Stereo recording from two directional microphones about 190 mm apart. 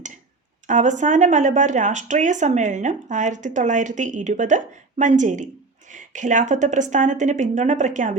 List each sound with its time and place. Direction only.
0.7 s speech: 40° right (ahead or behind)